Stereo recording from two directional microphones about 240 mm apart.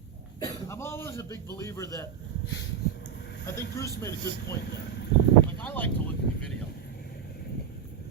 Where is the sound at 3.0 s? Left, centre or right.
Left.